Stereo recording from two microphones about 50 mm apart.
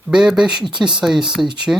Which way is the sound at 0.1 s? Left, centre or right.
Centre.